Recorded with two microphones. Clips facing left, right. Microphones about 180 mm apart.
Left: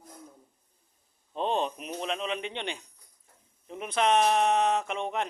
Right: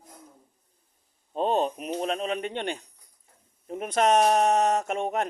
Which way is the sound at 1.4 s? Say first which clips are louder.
Right 4 dB; 45° right (ahead or behind).